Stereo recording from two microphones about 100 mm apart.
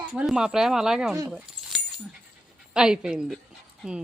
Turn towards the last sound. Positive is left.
turn(degrees=-10)  # may be behind; listen again after turning